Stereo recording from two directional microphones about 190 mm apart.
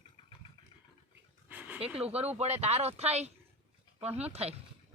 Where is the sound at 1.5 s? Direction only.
10° right (ahead or behind).